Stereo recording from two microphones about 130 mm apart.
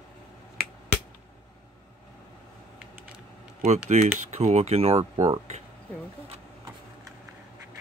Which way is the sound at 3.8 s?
60° right (ahead or behind).